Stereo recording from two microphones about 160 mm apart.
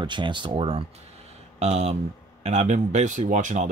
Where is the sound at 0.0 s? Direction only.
30° right (ahead or behind).